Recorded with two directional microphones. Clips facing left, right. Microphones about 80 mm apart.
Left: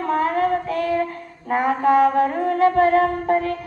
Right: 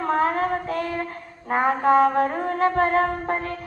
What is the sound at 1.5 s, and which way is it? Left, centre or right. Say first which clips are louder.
Mantra: left 1 dB; right.